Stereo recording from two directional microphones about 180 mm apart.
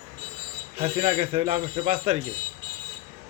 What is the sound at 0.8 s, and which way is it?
A man's voice, 30° right (ahead or behind).